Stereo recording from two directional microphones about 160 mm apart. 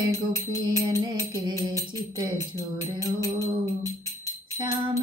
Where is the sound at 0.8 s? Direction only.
30° right (ahead or behind).